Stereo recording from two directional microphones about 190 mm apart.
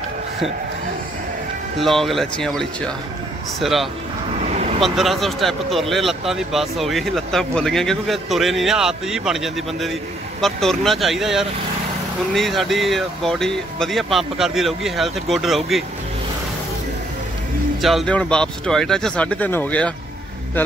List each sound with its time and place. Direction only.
1.8 s speech: centre (ahead or behind)
3.6 s speech: centre (ahead or behind)
4.5 s vehicle: 35° right (ahead or behind)
4.8 s speech: centre (ahead or behind)
17.8 s speech: 5° left (ahead or behind)